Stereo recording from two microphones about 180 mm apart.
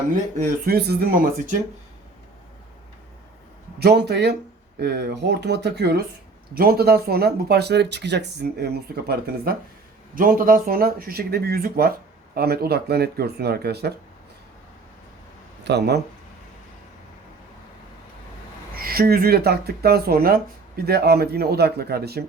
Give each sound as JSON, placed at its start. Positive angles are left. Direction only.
{"t": 0.6, "sound": "speech", "side_deg": -60}
{"t": 3.8, "sound": "speech", "side_deg": -65}
{"t": 15.6, "sound": "speech", "side_deg": -70}
{"t": 18.8, "sound": "speech", "side_deg": -55}